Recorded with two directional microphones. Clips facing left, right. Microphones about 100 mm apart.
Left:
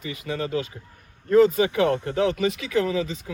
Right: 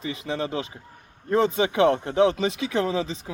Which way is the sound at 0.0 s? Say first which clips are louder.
Right 1 dB; 25° right (ahead or behind).